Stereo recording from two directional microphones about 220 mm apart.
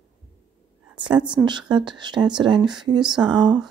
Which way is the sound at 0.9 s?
20° right (ahead or behind).